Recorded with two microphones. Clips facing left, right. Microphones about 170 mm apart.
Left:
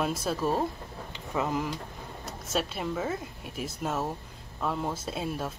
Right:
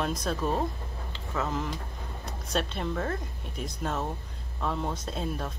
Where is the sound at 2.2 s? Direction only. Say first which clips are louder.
Even; 5° left (ahead or behind).